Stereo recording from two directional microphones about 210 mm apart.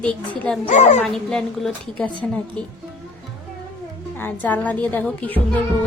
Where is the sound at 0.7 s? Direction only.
35° left (ahead or behind).